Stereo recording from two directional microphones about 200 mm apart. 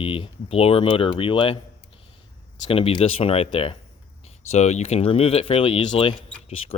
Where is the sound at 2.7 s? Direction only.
30° left (ahead or behind).